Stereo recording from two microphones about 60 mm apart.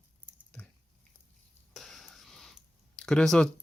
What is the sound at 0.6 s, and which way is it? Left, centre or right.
Biting, left.